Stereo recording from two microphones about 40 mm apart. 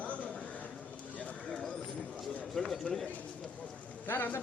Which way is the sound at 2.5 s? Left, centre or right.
Centre.